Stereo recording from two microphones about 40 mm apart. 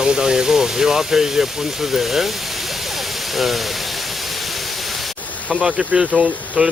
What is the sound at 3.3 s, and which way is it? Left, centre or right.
Speech, centre.